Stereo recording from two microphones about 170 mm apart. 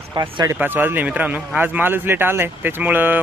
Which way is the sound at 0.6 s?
10° right (ahead or behind).